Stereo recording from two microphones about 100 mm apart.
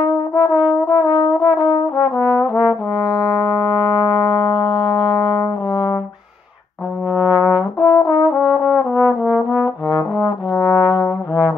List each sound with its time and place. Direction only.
0.7 s brass instrument: 40° left (ahead or behind)
2.1 s trombone: 10° right (ahead or behind)
2.5 s brass instrument: 35° left (ahead or behind)
3.3 s music: 35° left (ahead or behind)
7.2 s brass instrument: 15° right (ahead or behind)
7.8 s brass instrument: 40° left (ahead or behind)
8.6 s brass instrument: 15° right (ahead or behind)
10.6 s trombone: 5° right (ahead or behind)